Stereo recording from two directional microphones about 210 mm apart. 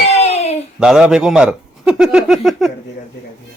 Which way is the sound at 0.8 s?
5° right (ahead or behind).